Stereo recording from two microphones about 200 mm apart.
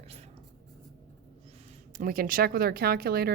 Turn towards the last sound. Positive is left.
turn(degrees=-50)  # may be behind; listen again after turning